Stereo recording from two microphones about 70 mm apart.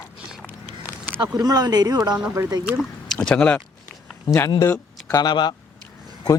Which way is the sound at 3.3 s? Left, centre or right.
Centre.